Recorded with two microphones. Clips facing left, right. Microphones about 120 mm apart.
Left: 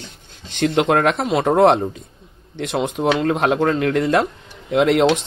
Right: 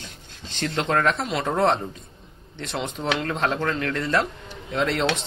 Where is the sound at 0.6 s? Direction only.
55° left (ahead or behind).